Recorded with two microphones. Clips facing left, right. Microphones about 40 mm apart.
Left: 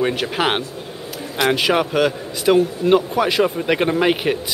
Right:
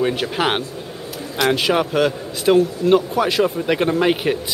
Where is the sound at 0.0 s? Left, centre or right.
Centre.